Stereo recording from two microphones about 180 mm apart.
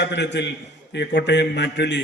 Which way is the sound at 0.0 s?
75° left (ahead or behind).